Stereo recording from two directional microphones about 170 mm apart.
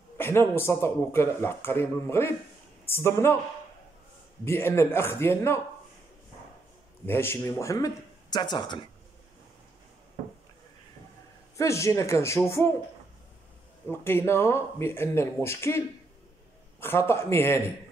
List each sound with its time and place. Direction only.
0.2 s speech: 15° left (ahead or behind)
4.5 s speech: 15° left (ahead or behind)
7.1 s speech: 15° left (ahead or behind)
11.5 s speech: 15° left (ahead or behind)
13.8 s speech: 15° left (ahead or behind)
16.8 s speech: 15° left (ahead or behind)